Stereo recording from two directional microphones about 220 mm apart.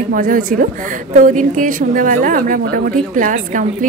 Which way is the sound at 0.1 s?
40° right (ahead or behind).